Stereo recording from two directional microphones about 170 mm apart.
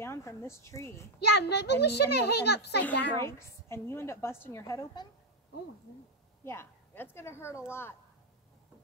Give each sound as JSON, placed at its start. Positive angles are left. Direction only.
{"t": 0.0, "sound": "a woman's voice", "side_deg": 15}
{"t": 1.2, "sound": "a child's voice", "side_deg": 80}
{"t": 3.2, "sound": "a woman's voice", "side_deg": 15}
{"t": 6.4, "sound": "a woman's voice", "side_deg": 15}